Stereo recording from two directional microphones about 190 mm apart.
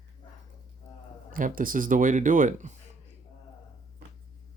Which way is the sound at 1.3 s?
45° right (ahead or behind).